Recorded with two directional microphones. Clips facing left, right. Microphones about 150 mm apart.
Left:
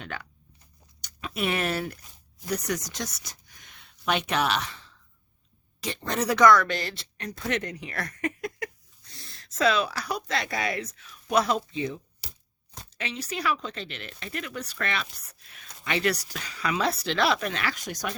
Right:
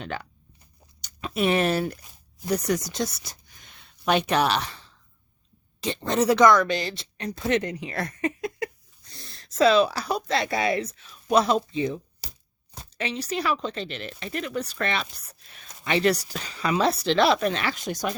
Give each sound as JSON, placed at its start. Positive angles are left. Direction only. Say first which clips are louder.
{"t": 0.0, "sound": "speech", "louder": "right 5 dB", "side_deg": -30}